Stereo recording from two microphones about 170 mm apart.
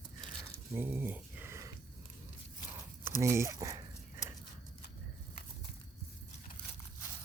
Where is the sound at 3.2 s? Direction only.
15° right (ahead or behind).